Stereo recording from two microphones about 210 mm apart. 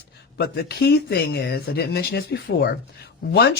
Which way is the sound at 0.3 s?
50° left (ahead or behind).